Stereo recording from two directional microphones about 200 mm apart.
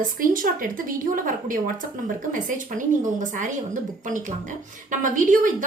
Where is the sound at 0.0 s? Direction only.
45° right (ahead or behind).